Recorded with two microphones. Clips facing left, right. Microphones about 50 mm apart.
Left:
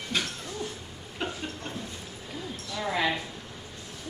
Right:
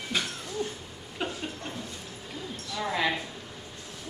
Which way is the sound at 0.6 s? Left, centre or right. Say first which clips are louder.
Right 3 dB; centre.